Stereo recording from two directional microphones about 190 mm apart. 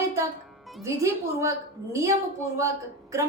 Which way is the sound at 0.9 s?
15° right (ahead or behind).